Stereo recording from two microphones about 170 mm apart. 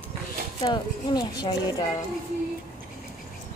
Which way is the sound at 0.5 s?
25° left (ahead or behind).